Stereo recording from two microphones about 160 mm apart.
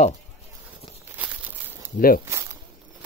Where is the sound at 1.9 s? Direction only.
60° left (ahead or behind).